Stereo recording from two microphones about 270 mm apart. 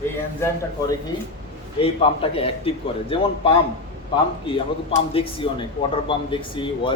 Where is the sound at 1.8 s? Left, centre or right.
Left.